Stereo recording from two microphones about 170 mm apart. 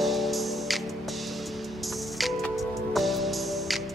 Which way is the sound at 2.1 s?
Centre (ahead or behind).